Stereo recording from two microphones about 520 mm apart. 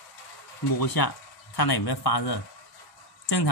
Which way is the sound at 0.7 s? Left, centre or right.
Left.